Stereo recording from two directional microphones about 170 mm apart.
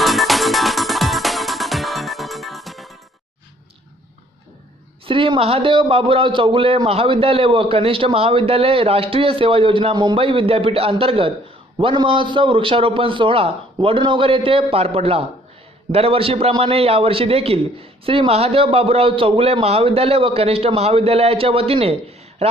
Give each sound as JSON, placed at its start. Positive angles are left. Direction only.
{"t": 0.0, "sound": "music", "side_deg": 0}
{"t": 5.0, "sound": "a man's voice", "side_deg": -30}